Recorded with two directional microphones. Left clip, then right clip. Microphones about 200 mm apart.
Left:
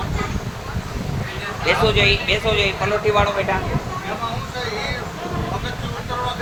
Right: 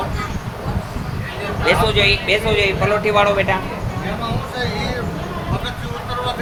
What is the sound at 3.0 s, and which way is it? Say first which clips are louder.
Speech: right 3 dB; 25° right (ahead or behind).